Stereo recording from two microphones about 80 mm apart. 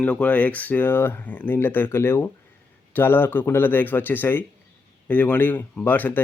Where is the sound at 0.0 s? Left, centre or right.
Centre.